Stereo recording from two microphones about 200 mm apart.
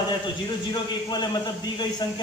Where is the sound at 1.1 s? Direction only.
20° left (ahead or behind).